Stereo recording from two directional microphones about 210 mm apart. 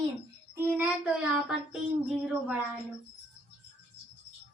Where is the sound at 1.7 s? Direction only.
Centre (ahead or behind).